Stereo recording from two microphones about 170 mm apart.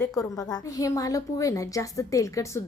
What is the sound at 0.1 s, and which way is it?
A woman's voice, 20° left (ahead or behind).